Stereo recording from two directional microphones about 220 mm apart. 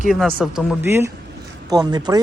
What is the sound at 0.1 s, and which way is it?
Speech, centre (ahead or behind).